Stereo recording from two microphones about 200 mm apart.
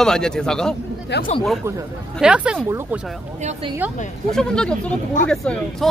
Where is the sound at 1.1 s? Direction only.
55° left (ahead or behind).